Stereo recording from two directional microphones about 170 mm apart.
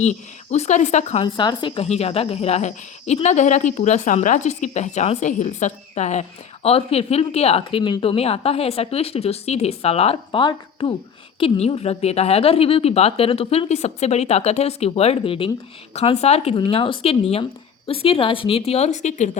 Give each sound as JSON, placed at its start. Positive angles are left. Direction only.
{"t": 0.0, "sound": "speech", "side_deg": 40}
{"t": 1.2, "sound": "a woman's voice", "side_deg": 25}